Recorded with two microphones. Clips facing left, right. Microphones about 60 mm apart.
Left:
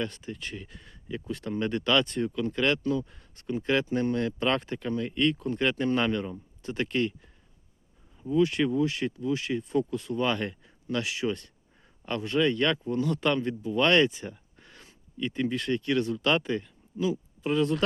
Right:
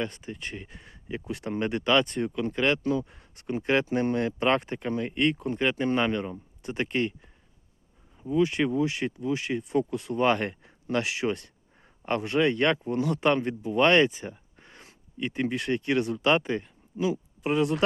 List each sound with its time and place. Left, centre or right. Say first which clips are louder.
0.0 s speech: right 1 dB; centre
5.5 s speech: right 1 dB; centre
8.2 s speech: even; centre
14.3 s a sound: right 1 dB; right
15.2 s speech: even; right